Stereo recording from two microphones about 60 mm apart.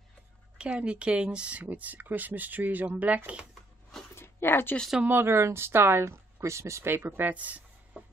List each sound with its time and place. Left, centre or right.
0.6 s speech: centre
4.1 s a sound: left
5.0 s speech: right